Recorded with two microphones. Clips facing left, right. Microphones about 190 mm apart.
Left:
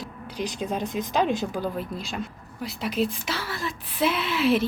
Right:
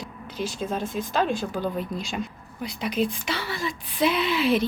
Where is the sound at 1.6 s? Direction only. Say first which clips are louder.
Right 1 dB; centre (ahead or behind).